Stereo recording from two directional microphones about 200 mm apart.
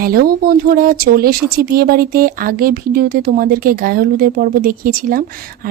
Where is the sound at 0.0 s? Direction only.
45° right (ahead or behind).